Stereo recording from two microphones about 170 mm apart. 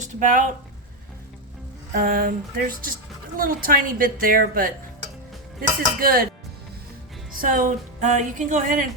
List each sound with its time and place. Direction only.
0.0 s speech: 50° right (ahead or behind)
1.9 s a woman's voice: 60° right (ahead or behind)
7.3 s music: 55° right (ahead or behind)